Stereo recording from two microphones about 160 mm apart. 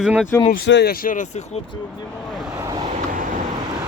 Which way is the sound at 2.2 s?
Centre (ahead or behind).